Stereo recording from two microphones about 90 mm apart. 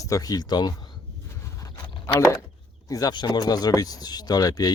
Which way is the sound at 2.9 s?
50° left (ahead or behind).